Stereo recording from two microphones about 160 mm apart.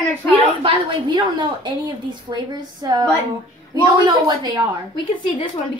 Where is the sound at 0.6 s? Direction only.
30° right (ahead or behind).